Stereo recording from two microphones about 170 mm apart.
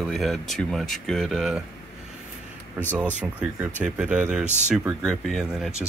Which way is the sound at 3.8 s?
5° right (ahead or behind).